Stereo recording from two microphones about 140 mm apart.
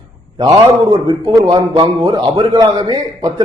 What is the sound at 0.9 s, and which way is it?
A man's voice, 30° right (ahead or behind).